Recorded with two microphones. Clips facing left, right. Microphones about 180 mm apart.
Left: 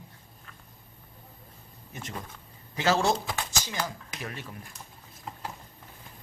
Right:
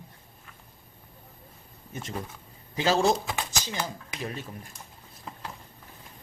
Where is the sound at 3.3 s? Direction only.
20° right (ahead or behind).